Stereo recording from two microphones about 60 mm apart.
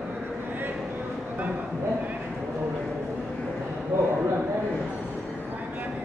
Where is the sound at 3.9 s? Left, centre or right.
Right.